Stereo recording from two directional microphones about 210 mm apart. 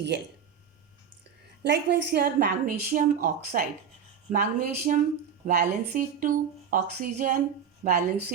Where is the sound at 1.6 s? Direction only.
55° right (ahead or behind); by 7.4 s 40° right (ahead or behind).